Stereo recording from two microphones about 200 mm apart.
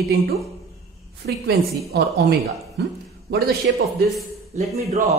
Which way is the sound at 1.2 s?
60° right (ahead or behind).